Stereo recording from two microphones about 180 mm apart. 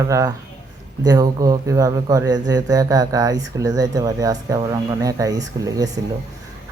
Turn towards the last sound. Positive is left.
turn(degrees=-20)  # may be behind; listen again after turning